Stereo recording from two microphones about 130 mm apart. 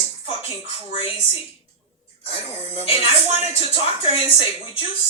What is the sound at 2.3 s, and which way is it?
Speech, 45° left (ahead or behind).